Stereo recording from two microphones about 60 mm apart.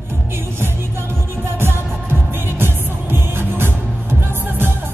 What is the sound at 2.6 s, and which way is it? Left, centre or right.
Music, right.